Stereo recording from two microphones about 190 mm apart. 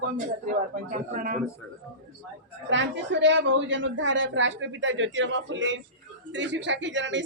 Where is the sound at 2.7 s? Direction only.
70° right (ahead or behind).